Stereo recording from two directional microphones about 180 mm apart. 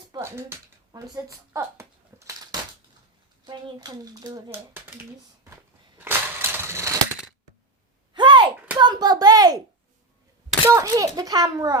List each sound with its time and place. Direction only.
0.1 s a sound: 15° right (ahead or behind)
3.4 s speech: 25° right (ahead or behind)
4.5 s speech: 10° right (ahead or behind)
6.0 s crushing: 10° right (ahead or behind)
8.1 s a sound: 25° right (ahead or behind)
10.8 s speech: 20° right (ahead or behind)